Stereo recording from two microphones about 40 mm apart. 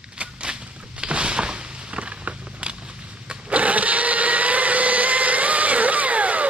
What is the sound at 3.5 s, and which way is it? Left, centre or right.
Vehicle, right.